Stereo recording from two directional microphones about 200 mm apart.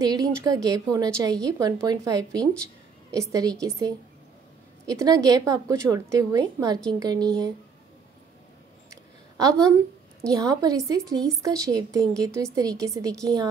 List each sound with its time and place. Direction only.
0.0 s a woman's voice: 20° right (ahead or behind)
8.9 s a sound: 15° right (ahead or behind)
10.3 s a woman's voice: 20° right (ahead or behind)